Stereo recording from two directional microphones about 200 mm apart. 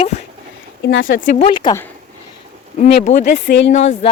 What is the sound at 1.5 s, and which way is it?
Speech, 20° left (ahead or behind).